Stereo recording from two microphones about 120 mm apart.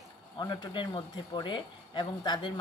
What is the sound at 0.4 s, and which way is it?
Speech, 40° left (ahead or behind).